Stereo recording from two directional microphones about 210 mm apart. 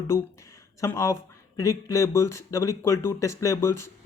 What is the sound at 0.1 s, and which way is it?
Speech, 15° left (ahead or behind).